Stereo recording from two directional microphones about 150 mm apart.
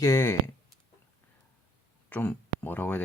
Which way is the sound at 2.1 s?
15° left (ahead or behind).